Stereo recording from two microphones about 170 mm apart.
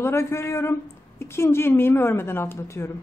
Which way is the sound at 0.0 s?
15° left (ahead or behind).